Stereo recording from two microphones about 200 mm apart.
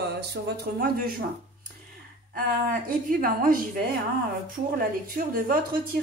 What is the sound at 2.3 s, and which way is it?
A woman's voice, 45° right (ahead or behind).